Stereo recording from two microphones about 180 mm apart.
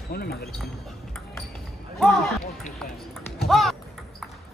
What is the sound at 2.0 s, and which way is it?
Speech, centre (ahead or behind).